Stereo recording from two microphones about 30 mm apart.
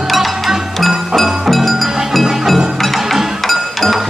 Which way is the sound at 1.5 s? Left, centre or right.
Centre.